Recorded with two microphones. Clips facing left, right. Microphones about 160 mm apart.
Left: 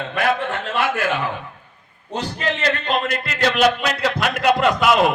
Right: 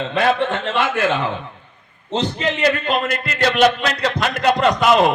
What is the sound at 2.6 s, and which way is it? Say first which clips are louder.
A man's voice: right 4 dB; 5° right (ahead or behind).